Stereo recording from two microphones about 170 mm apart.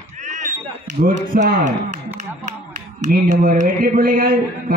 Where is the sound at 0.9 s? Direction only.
65° right (ahead or behind).